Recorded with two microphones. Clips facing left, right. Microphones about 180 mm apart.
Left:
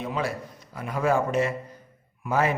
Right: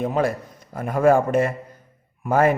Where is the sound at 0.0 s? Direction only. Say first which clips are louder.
Right 7 dB; 50° right (ahead or behind).